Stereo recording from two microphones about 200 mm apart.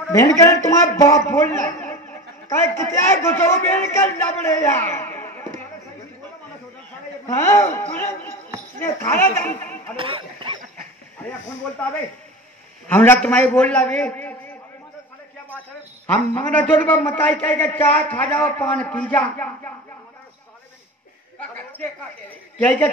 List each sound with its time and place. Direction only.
0.1 s a man's voice: 15° left (ahead or behind)
7.2 s a sound: 15° left (ahead or behind)
8.8 s a man's voice: 10° left (ahead or behind)
9.9 s a sound: 25° right (ahead or behind)
12.8 s a man's voice: 10° left (ahead or behind)
16.1 s a man's voice: 10° left (ahead or behind)
21.4 s a woman's voice: 5° left (ahead or behind)